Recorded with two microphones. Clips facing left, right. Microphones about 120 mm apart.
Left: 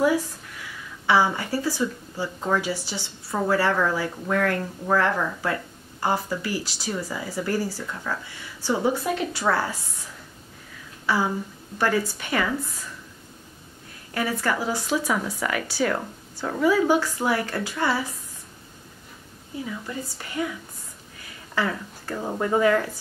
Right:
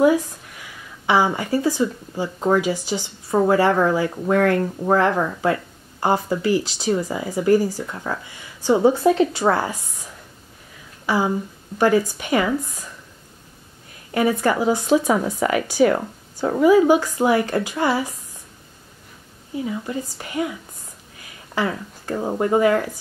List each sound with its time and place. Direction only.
1.0 s speech: 15° right (ahead or behind)
11.1 s speech: 15° right (ahead or behind)
14.1 s speech: 20° right (ahead or behind)
19.6 s speech: 25° right (ahead or behind)
21.5 s speech: 20° right (ahead or behind)